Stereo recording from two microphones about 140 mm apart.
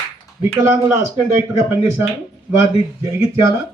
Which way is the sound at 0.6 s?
20° right (ahead or behind).